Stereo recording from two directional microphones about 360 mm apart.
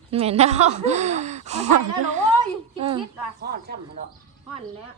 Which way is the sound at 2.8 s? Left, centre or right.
Centre.